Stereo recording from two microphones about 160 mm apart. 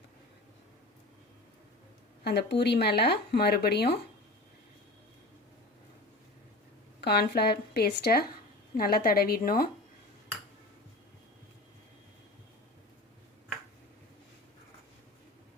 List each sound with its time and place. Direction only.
2.2 s speech: 90° left
7.0 s a woman's voice: 90° left; by 9.6 s 65° left (ahead or behind)